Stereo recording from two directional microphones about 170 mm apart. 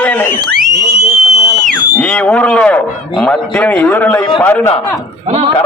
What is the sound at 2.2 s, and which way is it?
A man's voice, 5° left (ahead or behind).